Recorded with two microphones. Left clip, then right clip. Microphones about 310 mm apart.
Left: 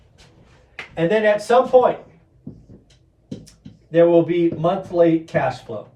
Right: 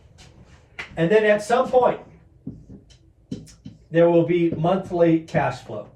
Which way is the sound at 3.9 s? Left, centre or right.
Centre.